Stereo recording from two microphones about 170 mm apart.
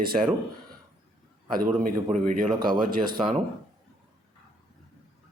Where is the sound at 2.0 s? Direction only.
50° right (ahead or behind).